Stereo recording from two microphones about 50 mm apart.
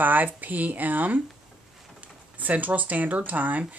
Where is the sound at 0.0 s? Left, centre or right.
Right.